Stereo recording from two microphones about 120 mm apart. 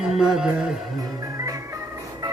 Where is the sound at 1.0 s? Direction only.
30° right (ahead or behind).